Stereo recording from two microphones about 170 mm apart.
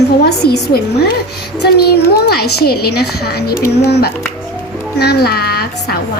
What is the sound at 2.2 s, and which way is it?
A woman's voice, 70° left (ahead or behind).